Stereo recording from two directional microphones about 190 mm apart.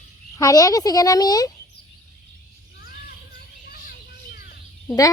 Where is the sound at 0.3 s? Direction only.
20° left (ahead or behind).